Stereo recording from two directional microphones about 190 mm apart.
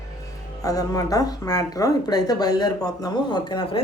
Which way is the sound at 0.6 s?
20° left (ahead or behind).